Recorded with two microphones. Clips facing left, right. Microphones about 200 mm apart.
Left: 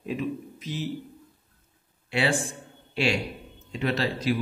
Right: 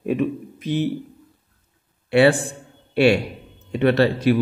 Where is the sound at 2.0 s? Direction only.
60° right (ahead or behind).